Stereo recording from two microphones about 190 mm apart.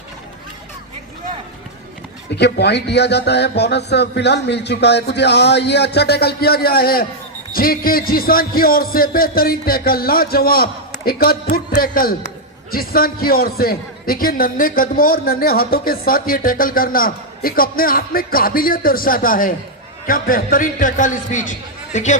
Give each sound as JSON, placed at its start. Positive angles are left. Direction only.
{"t": 2.3, "sound": "a man's voice", "side_deg": 60}